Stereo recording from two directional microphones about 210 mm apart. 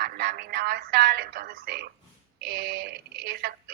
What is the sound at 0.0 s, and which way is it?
Speech, 45° right (ahead or behind).